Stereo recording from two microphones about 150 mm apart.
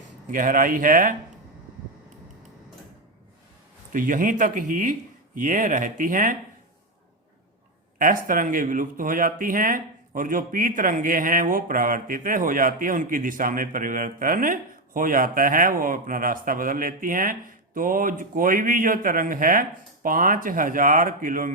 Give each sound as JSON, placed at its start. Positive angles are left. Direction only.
{"t": 0.3, "sound": "a man's voice", "side_deg": -65}
{"t": 3.9, "sound": "a man's voice", "side_deg": -65}
{"t": 7.9, "sound": "a man's voice", "side_deg": -65}